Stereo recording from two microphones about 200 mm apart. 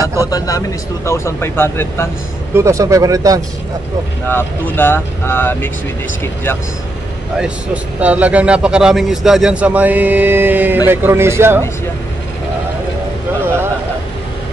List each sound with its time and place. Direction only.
0.0 s a man's voice: 15° right (ahead or behind)
0.3 s speech: 15° left (ahead or behind)
2.5 s a man's voice: 15° right (ahead or behind)
4.3 s speech: 10° left (ahead or behind)
7.3 s a man's voice: 5° right (ahead or behind)